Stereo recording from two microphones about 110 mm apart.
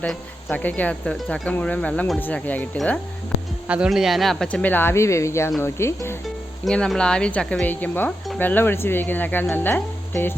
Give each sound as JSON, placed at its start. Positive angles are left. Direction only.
{"t": 0.0, "sound": "speech", "side_deg": 5}
{"t": 0.5, "sound": "a woman's voice", "side_deg": 15}
{"t": 3.7, "sound": "speech", "side_deg": -5}
{"t": 4.7, "sound": "speech", "side_deg": 20}
{"t": 6.7, "sound": "a woman's voice", "side_deg": 5}